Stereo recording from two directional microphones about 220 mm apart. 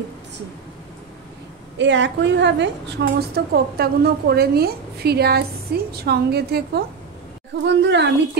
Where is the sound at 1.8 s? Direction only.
55° right (ahead or behind).